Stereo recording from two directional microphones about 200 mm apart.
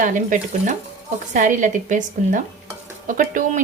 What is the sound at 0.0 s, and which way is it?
A woman's voice, 40° right (ahead or behind).